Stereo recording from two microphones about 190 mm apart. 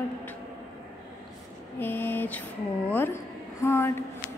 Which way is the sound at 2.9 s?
10° left (ahead or behind).